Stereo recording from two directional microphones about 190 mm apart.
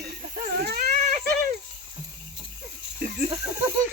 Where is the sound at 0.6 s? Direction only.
55° right (ahead or behind).